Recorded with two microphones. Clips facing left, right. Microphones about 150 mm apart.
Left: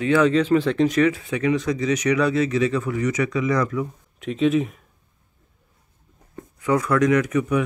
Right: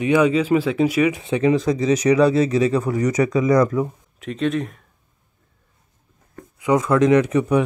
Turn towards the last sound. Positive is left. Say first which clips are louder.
# right 4 dB
turn(degrees=-30)  # may be behind; listen again after turning